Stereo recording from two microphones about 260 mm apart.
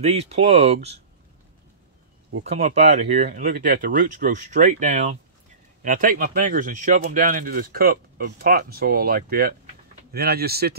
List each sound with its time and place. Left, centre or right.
0.0 s speech: right
2.4 s speech: right